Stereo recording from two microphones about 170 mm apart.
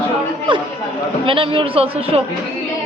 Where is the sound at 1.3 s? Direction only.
30° right (ahead or behind).